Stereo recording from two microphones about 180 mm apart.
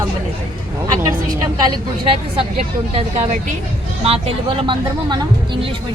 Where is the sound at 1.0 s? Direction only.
20° right (ahead or behind).